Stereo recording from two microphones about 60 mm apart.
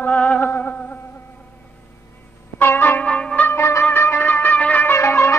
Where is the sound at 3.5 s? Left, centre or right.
Left.